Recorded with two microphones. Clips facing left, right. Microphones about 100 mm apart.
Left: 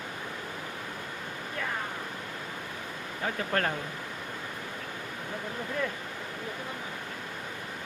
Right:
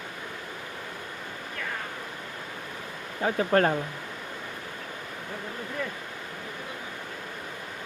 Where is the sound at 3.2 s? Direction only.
30° right (ahead or behind).